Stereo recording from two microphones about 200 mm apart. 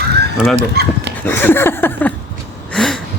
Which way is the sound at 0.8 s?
55° right (ahead or behind).